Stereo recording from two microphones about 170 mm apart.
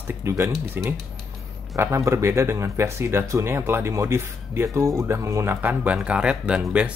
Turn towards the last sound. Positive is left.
turn(degrees=-5)  # may be behind; listen again after turning